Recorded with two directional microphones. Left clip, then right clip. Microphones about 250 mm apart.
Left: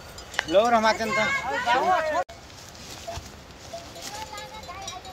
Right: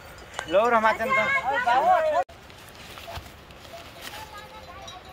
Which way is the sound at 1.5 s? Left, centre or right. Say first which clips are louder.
Right 3 dB; right.